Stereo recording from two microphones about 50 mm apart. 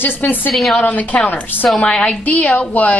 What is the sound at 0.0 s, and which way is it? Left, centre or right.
A woman's voice, left.